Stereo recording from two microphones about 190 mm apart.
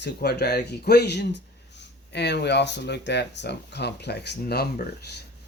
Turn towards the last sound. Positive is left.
turn(degrees=55)  # may be behind; listen again after turning